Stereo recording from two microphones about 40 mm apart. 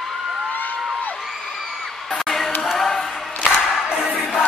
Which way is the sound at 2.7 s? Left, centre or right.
Centre.